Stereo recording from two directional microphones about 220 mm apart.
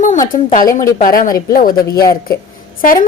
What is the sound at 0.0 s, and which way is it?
A woman's voice, 35° left (ahead or behind).